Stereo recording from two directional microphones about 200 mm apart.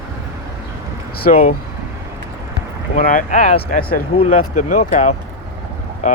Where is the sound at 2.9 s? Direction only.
40° left (ahead or behind).